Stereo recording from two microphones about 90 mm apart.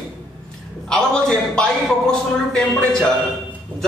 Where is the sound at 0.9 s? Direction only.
10° left (ahead or behind).